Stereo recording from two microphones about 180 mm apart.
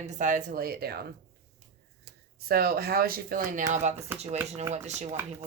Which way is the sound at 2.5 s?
55° right (ahead or behind).